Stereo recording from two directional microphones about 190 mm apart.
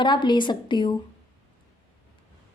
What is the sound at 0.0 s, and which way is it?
Speech, 25° left (ahead or behind).